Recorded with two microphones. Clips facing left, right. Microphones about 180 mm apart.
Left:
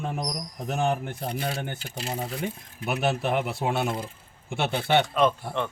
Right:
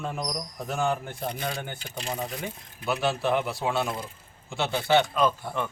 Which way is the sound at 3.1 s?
25° left (ahead or behind).